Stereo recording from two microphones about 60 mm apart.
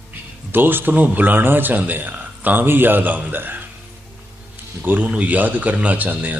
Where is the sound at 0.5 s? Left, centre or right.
Right.